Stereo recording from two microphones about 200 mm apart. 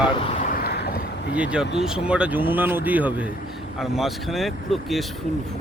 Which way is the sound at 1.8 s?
5° right (ahead or behind).